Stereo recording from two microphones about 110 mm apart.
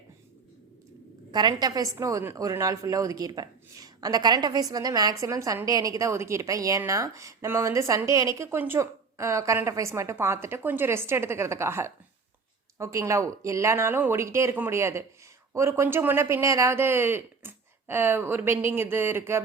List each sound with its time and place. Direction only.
1.3 s a woman's voice: 40° right (ahead or behind); by 19.4 s 20° right (ahead or behind)